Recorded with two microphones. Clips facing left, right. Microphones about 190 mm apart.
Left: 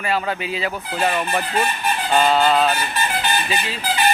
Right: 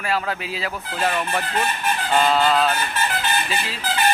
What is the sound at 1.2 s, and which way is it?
Speech, 10° left (ahead or behind).